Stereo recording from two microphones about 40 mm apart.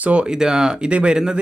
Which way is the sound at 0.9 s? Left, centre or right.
Right.